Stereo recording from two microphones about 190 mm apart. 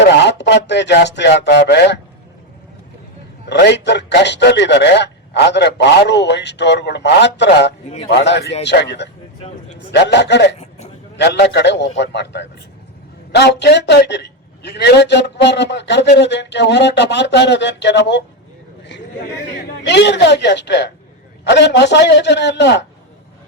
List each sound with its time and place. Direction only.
0.0 s speech: 65° left (ahead or behind)
3.5 s a man's voice: 65° left (ahead or behind)
19.8 s a man's voice: 65° left (ahead or behind)